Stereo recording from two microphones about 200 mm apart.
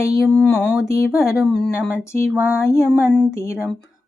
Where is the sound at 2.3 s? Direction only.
5° right (ahead or behind).